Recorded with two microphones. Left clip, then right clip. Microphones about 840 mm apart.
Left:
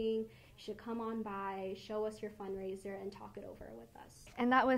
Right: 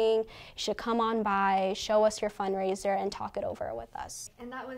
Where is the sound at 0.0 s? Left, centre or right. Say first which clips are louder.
Right 11 dB; right.